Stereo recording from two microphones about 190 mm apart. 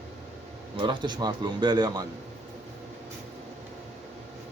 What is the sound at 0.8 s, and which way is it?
Speech, 25° right (ahead or behind).